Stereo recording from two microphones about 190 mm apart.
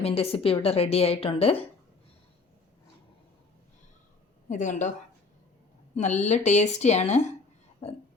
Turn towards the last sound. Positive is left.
turn(degrees=35)  # may be behind; listen again after turning